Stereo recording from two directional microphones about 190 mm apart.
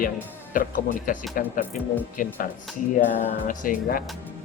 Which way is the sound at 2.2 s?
45° left (ahead or behind).